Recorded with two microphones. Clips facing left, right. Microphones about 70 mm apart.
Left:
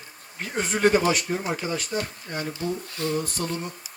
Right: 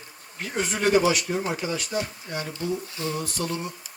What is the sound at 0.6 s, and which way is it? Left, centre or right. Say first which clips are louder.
Speech: left 1 dB; left.